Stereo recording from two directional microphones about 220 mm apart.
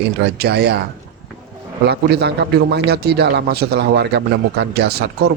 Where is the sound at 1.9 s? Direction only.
50° right (ahead or behind).